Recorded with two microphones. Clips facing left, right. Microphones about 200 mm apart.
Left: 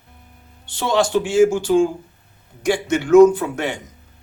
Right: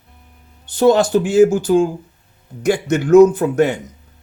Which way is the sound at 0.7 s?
45° right (ahead or behind).